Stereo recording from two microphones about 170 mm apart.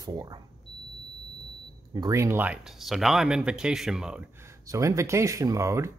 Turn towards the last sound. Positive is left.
turn(degrees=-15)  # may be behind; listen again after turning